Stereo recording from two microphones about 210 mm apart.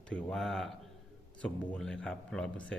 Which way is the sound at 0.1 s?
5° left (ahead or behind).